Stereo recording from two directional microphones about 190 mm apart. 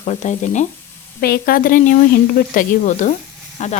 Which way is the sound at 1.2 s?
55° left (ahead or behind).